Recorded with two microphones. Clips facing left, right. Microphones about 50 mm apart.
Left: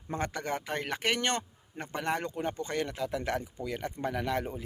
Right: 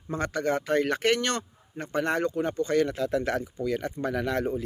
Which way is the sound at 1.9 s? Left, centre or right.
Centre.